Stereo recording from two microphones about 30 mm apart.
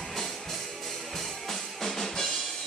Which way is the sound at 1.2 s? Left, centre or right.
Centre.